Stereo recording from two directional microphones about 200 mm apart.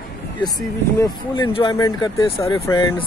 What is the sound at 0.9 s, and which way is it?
Speech, 20° left (ahead or behind).